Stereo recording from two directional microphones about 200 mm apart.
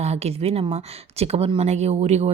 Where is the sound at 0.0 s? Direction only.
30° right (ahead or behind).